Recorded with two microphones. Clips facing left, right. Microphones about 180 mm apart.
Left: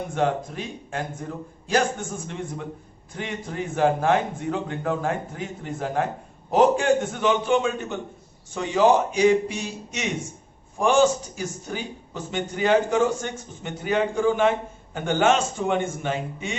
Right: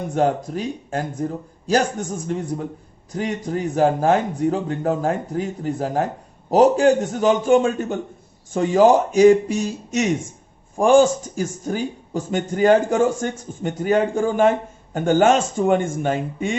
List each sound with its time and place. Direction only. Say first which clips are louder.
0.1 s a man's voice: right 5 dB; 40° right (ahead or behind)